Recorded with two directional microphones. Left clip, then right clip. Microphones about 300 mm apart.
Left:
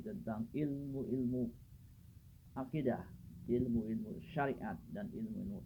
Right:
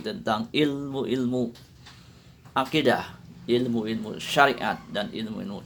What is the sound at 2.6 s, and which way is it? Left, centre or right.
Speech, centre.